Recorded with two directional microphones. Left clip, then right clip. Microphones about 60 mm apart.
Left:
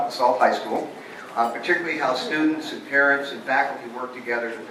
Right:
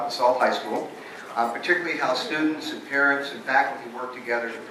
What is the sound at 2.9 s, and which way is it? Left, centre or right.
Speech, centre.